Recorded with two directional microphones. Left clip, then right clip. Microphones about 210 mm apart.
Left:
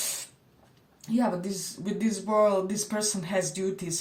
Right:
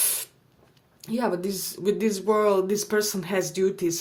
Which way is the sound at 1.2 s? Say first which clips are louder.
Right 3 dB; 45° right (ahead or behind).